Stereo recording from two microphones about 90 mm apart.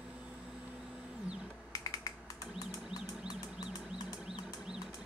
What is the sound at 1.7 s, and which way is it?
Finger snapping, 40° left (ahead or behind).